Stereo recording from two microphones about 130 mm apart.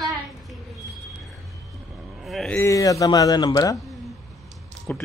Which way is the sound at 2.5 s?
25° left (ahead or behind).